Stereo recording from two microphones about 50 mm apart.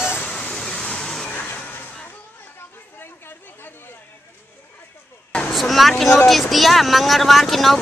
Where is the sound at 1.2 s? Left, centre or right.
Left.